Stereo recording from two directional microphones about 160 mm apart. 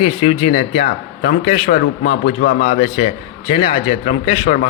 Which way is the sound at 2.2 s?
60° left (ahead or behind).